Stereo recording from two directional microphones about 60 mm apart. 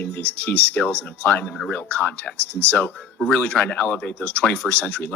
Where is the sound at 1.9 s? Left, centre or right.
Left.